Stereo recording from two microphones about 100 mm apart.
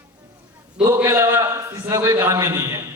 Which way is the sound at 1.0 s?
25° right (ahead or behind).